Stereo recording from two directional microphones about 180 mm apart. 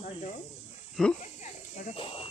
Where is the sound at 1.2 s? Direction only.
40° left (ahead or behind).